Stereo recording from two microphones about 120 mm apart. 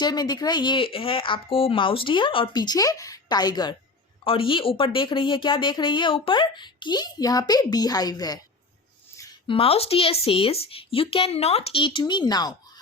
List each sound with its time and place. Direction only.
0.0 s speech: 35° left (ahead or behind)
4.2 s speech: 50° left (ahead or behind); by 8.4 s 35° left (ahead or behind)
9.5 s a woman's voice: 50° left (ahead or behind); by 12.5 s 35° left (ahead or behind)